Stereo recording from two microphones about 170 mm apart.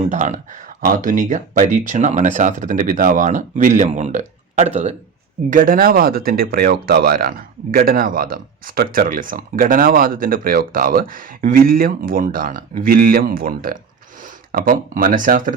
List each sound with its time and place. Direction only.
0.1 s speech: 45° right (ahead or behind)
5.5 s speech: 50° right (ahead or behind)